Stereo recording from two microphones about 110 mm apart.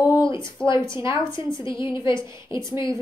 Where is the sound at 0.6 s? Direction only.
10° left (ahead or behind).